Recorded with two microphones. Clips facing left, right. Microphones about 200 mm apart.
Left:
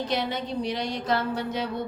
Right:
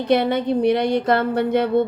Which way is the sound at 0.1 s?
60° right (ahead or behind).